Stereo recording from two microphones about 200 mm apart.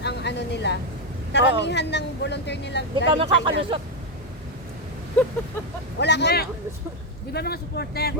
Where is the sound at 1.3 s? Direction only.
60° left (ahead or behind).